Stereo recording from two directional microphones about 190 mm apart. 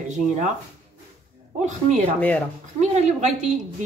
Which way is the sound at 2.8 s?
40° right (ahead or behind).